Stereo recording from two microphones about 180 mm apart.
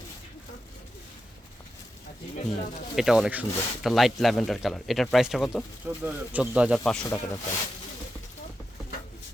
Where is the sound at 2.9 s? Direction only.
Centre (ahead or behind).